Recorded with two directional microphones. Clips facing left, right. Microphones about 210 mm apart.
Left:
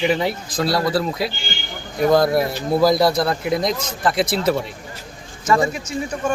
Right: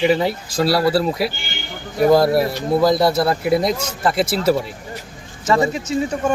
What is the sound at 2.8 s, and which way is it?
A man's voice, centre (ahead or behind).